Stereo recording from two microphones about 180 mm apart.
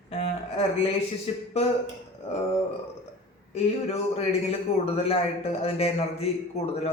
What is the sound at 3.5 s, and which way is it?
A man's voice, 35° left (ahead or behind).